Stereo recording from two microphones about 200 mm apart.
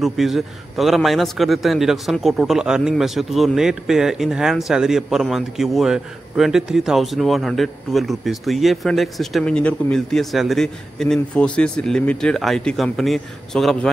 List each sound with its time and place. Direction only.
0.0 s a man's voice: centre (ahead or behind)